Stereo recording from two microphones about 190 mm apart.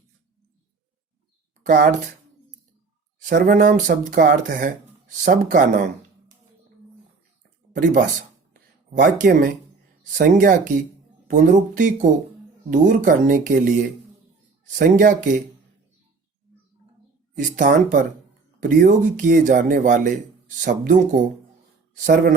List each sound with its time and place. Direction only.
1.6 s speech: 50° right (ahead or behind)
3.2 s speech: 45° right (ahead or behind)
7.7 s speech: 45° right (ahead or behind)
14.8 s speech: 45° right (ahead or behind)
17.3 s speech: 45° right (ahead or behind)